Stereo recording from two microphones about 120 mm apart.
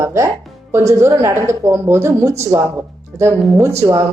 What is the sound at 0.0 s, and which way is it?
A woman's voice, 25° right (ahead or behind).